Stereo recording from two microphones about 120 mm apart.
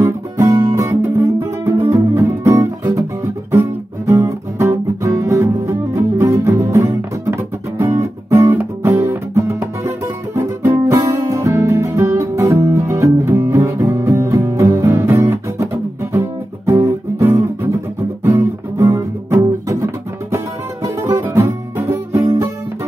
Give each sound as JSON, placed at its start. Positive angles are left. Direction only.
{"t": 0.0, "sound": "music", "side_deg": -30}
{"t": 2.8, "sound": "guitar", "side_deg": -30}
{"t": 3.5, "sound": "music", "side_deg": -25}